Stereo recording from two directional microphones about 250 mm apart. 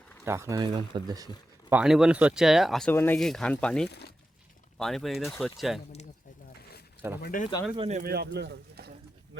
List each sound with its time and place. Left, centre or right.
0.3 s speech: centre
1.7 s speech: centre
3.8 s speech: left
4.8 s speech: centre
7.2 s speech: left
7.8 s speech: right